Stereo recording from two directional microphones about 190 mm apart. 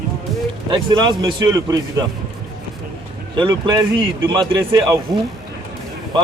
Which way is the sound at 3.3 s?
25° right (ahead or behind).